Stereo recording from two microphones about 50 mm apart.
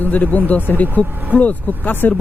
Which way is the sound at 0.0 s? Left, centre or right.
Left.